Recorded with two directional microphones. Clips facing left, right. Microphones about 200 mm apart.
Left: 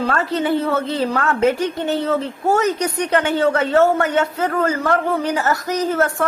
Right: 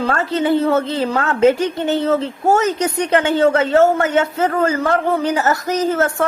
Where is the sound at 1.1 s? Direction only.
25° right (ahead or behind).